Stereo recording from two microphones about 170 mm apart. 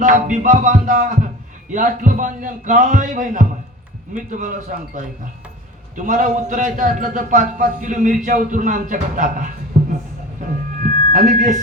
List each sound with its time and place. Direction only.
0.0 s a man's voice: 50° right (ahead or behind)
6.0 s a man's voice: 45° right (ahead or behind)
10.8 s a sound: 45° right (ahead or behind)